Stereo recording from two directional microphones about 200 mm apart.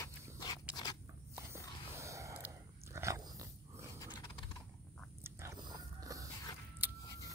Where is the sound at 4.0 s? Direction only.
20° left (ahead or behind).